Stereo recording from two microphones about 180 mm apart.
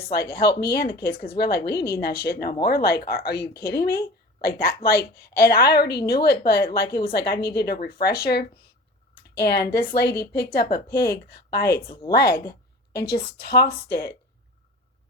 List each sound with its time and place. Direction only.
0.3 s a woman's voice: 65° left (ahead or behind)